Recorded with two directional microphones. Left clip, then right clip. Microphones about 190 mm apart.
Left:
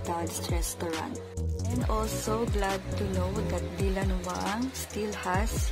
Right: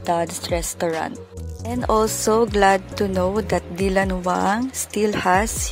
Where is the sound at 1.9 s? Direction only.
45° right (ahead or behind).